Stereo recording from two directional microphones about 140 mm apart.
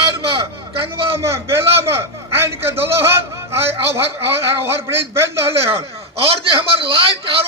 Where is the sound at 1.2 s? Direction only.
20° right (ahead or behind).